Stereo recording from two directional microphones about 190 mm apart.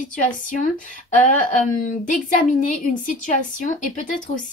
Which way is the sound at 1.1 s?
45° left (ahead or behind).